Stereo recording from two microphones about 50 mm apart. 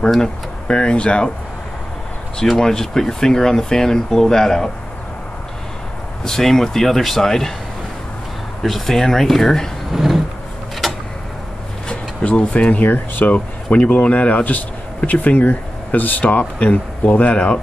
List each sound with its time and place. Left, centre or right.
0.2 s speech: centre
2.3 s speech: centre
6.2 s speech: centre
8.6 s speech: centre
10.8 s a sound: centre
12.3 s speech: left
12.7 s speech: left
13.3 s speech: left